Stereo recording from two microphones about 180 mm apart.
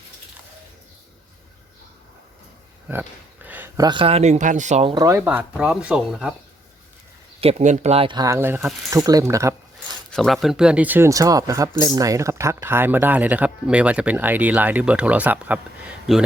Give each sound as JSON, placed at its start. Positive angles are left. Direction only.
{"t": 2.9, "sound": "a sound", "side_deg": -10}
{"t": 3.8, "sound": "speech", "side_deg": -25}
{"t": 5.0, "sound": "speech", "side_deg": -10}
{"t": 7.4, "sound": "speech", "side_deg": -40}
{"t": 10.1, "sound": "speech", "side_deg": 0}